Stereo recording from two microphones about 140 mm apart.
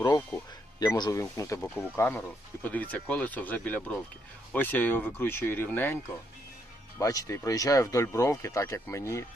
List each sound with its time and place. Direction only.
0.8 s speech: 30° left (ahead or behind); by 6.0 s 15° left (ahead or behind)
7.0 s speech: 25° left (ahead or behind)